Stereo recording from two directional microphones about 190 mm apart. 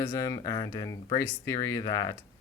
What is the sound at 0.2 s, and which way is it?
Speech, 15° left (ahead or behind).